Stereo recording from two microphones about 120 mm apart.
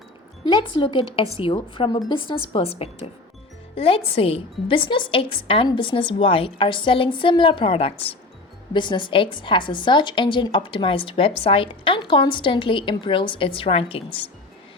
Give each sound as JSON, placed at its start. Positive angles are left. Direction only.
{"t": 0.4, "sound": "a woman's voice", "side_deg": 40}
{"t": 8.7, "sound": "a woman's voice", "side_deg": 40}